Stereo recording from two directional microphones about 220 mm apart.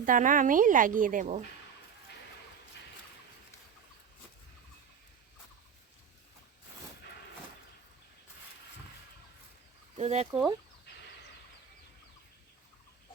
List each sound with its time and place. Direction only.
0.0 s a woman's voice: 35° right (ahead or behind)
10.0 s speech: 30° right (ahead or behind)